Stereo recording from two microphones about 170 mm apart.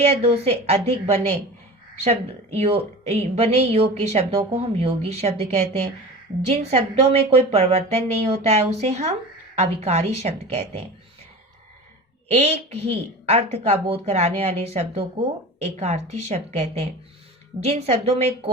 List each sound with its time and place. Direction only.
0.0 s speech: 35° right (ahead or behind)
12.3 s speech: 40° right (ahead or behind)